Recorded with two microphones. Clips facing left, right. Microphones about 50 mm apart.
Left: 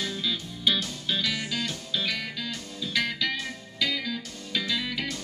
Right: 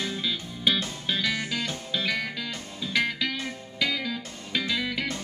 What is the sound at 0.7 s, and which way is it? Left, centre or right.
Music, right.